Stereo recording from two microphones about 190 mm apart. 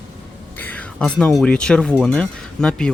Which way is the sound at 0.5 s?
10° left (ahead or behind).